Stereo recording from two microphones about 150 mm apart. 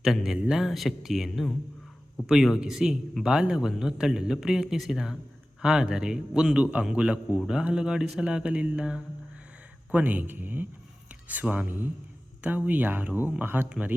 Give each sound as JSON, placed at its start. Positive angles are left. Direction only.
{"t": 0.0, "sound": "a man's voice", "side_deg": 0}